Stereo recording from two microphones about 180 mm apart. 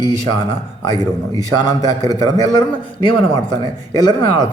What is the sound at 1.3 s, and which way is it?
Speech, 20° left (ahead or behind).